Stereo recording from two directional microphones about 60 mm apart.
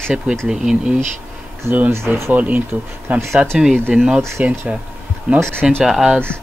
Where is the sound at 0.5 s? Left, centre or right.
Centre.